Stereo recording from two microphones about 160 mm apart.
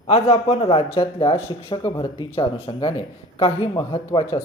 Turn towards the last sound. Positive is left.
turn(degrees=30)  # may be behind; listen again after turning